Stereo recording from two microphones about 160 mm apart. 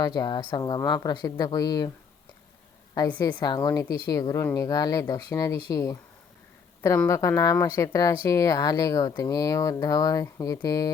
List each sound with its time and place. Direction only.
0.0 s speech: 25° left (ahead or behind)
3.2 s speech: 25° left (ahead or behind)
7.1 s speech: 20° left (ahead or behind)